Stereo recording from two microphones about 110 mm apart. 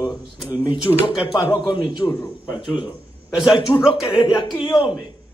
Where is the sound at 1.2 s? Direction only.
50° left (ahead or behind).